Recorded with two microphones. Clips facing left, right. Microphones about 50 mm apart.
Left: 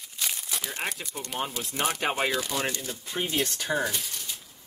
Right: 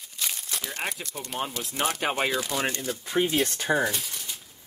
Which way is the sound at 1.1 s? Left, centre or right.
Centre.